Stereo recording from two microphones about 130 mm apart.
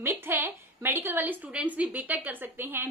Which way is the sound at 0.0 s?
15° right (ahead or behind).